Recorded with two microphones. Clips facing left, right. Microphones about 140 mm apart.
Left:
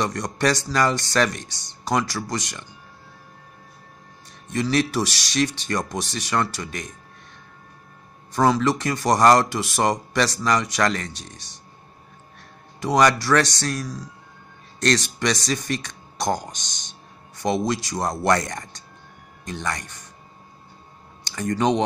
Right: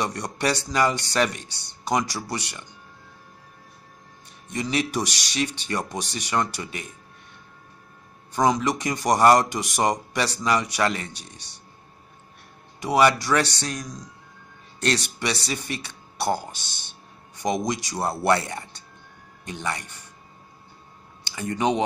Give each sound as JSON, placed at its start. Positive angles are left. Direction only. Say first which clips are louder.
{"t": 0.0, "sound": "a man's voice", "louder": "left 3 dB", "side_deg": -15}
{"t": 4.5, "sound": "a man's voice", "louder": "left 4 dB", "side_deg": -15}
{"t": 8.4, "sound": "a man's voice", "louder": "left 2 dB", "side_deg": -15}
{"t": 12.8, "sound": "a man's voice", "louder": "left 1 dB", "side_deg": -10}
{"t": 17.4, "sound": "a man's voice", "louder": "left 2 dB", "side_deg": -15}
{"t": 21.3, "sound": "speech", "louder": "left 3 dB", "side_deg": -10}